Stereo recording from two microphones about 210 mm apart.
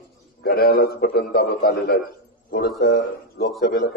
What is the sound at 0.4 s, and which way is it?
A man's voice, 45° left (ahead or behind).